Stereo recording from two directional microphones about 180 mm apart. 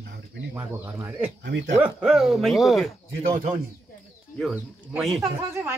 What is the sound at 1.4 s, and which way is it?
Speech, 75° right (ahead or behind).